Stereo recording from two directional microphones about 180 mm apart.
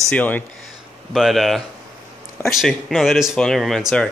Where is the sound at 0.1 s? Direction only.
10° left (ahead or behind).